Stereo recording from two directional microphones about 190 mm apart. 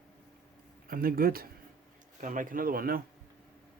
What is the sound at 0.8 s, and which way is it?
Speech, 50° right (ahead or behind).